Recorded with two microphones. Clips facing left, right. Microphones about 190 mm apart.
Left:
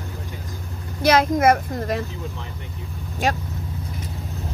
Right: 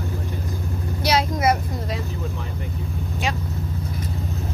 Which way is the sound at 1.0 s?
50° left (ahead or behind).